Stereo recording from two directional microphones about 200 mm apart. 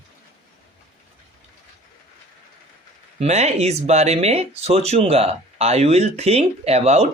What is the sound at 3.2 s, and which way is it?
Speech, 30° right (ahead or behind).